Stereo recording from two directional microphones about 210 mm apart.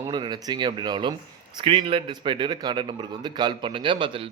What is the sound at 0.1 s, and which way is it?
A man's voice, 20° right (ahead or behind).